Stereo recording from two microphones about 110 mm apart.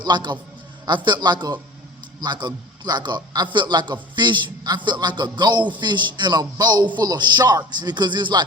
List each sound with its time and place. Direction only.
0.0 s a man's voice: 45° right (ahead or behind)